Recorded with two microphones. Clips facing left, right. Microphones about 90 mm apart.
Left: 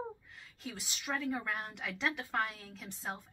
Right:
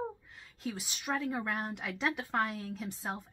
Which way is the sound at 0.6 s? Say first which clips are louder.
Right 4 dB; 5° right (ahead or behind).